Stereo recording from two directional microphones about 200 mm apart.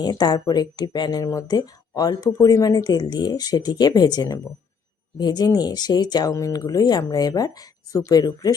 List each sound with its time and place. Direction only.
0.0 s speech: 20° left (ahead or behind)